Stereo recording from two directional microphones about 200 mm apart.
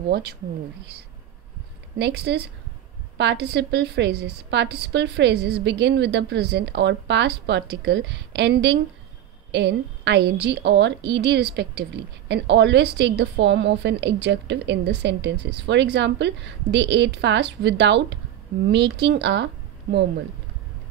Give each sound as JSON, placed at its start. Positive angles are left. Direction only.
{"t": 0.1, "sound": "speech", "side_deg": -55}
{"t": 2.0, "sound": "a woman's voice", "side_deg": -60}